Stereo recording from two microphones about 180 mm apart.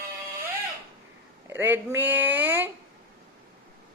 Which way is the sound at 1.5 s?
10° right (ahead or behind).